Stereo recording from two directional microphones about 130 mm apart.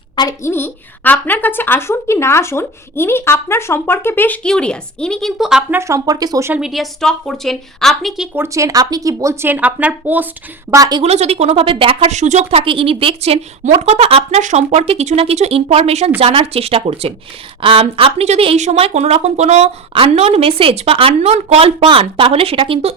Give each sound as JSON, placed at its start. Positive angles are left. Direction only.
{"t": 0.2, "sound": "a woman's voice", "side_deg": 25}
{"t": 5.7, "sound": "speech", "side_deg": -20}
{"t": 6.5, "sound": "a woman's voice", "side_deg": -5}
{"t": 8.4, "sound": "speech", "side_deg": -25}
{"t": 10.7, "sound": "speech", "side_deg": -30}
{"t": 11.0, "sound": "speech", "side_deg": -55}
{"t": 12.1, "sound": "speech", "side_deg": -65}
{"t": 19.9, "sound": "speech", "side_deg": -45}
{"t": 21.8, "sound": "speech", "side_deg": -40}